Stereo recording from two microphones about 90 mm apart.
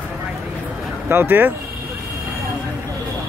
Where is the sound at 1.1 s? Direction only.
25° right (ahead or behind).